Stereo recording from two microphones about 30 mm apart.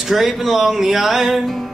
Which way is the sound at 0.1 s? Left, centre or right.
Centre.